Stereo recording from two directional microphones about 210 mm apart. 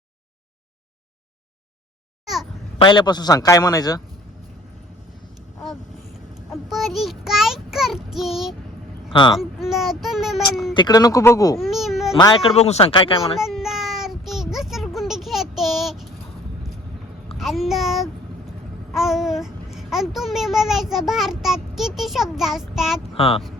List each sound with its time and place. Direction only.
2.7 s a man's voice: 20° left (ahead or behind)
6.5 s child singing: centre (ahead or behind)
9.3 s speech: centre (ahead or behind)
10.8 s a man's voice: 20° left (ahead or behind)
11.5 s baby cry: centre (ahead or behind)
12.1 s speech: 25° left (ahead or behind)
13.4 s child singing: centre (ahead or behind)
17.3 s a sound: centre (ahead or behind)
18.9 s speech: centre (ahead or behind)
23.1 s speech: 25° left (ahead or behind)